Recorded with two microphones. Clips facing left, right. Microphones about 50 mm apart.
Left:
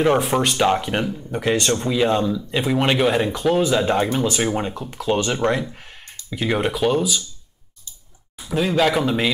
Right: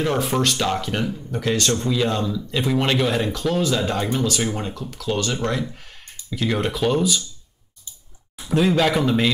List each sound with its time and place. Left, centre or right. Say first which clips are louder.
0.0 s speech: left 3 dB; left
6.7 s speech: left 1 dB; centre
8.4 s a man's voice: right 1 dB; centre